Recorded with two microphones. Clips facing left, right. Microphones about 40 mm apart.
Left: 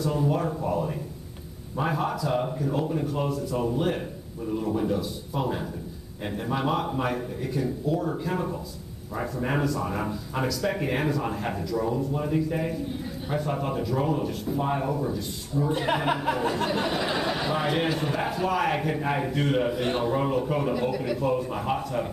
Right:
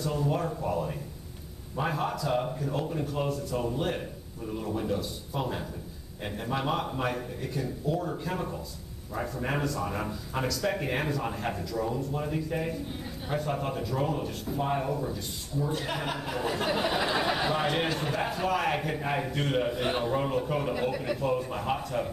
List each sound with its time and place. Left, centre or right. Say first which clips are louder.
0.0 s a man's voice: left 4 dB; centre
15.7 s speech: left 7 dB; left
16.2 s a sound: left 5 dB; centre
16.5 s a man's voice: left 2 dB; centre